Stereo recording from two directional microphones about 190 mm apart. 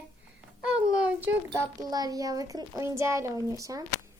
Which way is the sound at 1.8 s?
20° right (ahead or behind).